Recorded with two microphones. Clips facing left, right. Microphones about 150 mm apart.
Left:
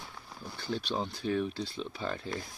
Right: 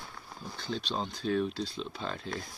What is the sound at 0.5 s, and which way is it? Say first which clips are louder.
Speech: left 1 dB; 10° left (ahead or behind).